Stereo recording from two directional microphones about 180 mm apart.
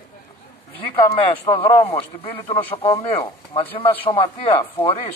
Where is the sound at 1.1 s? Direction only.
30° left (ahead or behind).